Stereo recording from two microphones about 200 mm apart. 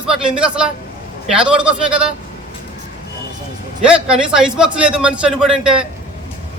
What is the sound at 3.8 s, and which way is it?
Speech, 5° right (ahead or behind).